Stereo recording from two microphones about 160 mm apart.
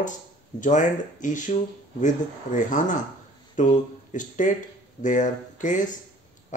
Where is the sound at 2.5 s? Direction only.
50° left (ahead or behind).